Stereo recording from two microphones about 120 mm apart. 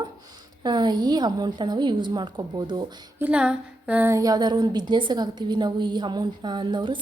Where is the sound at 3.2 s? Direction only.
10° right (ahead or behind).